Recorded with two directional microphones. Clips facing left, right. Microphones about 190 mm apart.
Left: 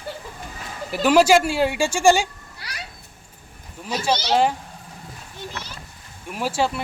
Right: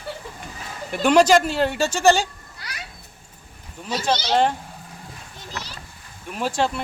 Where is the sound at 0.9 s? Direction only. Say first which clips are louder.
Even; 5° left (ahead or behind).